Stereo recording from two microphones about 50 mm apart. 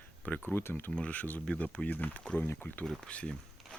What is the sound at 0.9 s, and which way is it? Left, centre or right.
Speech, left.